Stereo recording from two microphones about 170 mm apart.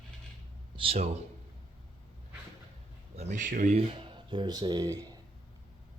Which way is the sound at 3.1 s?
50° right (ahead or behind).